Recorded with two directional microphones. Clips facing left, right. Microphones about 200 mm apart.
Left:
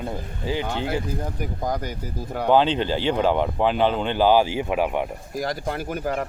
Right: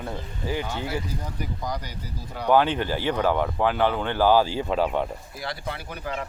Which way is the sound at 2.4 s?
20° left (ahead or behind).